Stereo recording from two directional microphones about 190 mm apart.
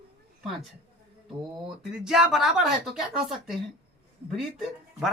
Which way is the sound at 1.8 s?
Centre (ahead or behind).